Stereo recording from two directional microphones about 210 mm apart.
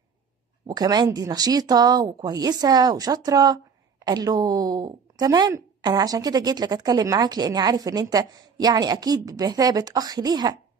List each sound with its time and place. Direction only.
0.7 s speech: 20° right (ahead or behind)